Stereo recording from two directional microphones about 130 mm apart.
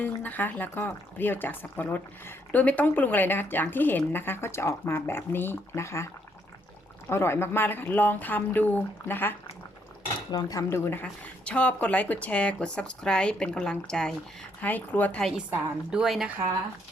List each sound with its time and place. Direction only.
0.0 s speech: 15° left (ahead or behind)
7.1 s speech: 20° left (ahead or behind)
10.3 s speech: 25° left (ahead or behind)
15.4 s a woman's voice: 5° right (ahead or behind)